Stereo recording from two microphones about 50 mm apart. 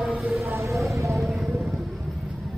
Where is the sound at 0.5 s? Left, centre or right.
Right.